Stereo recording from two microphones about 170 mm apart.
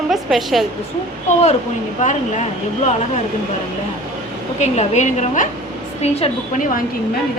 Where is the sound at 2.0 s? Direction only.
45° left (ahead or behind).